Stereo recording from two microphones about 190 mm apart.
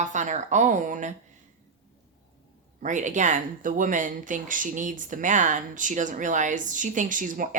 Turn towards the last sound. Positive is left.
turn(degrees=-45)  # may be behind; listen again after turning